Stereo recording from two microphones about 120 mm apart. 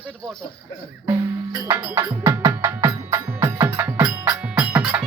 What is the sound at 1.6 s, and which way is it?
Music, 20° right (ahead or behind).